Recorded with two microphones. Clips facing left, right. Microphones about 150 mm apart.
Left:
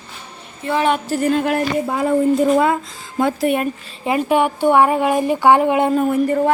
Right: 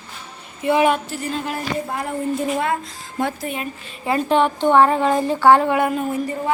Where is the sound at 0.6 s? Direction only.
15° right (ahead or behind).